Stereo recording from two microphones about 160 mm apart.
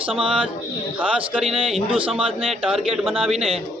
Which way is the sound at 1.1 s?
5° right (ahead or behind).